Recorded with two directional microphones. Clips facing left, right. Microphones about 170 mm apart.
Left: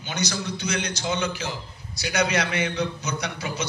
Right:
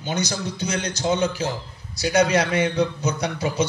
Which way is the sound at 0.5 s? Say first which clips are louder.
Right 2 dB; 30° right (ahead or behind).